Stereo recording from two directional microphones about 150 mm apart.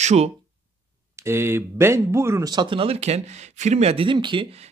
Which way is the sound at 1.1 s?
15° right (ahead or behind).